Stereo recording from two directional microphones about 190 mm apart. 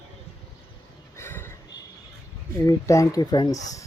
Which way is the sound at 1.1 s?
10° left (ahead or behind).